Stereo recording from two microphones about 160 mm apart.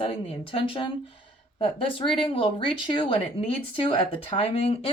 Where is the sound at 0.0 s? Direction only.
35° left (ahead or behind).